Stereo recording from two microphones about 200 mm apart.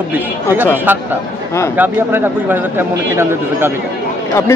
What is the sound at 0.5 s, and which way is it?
Speech, 10° right (ahead or behind).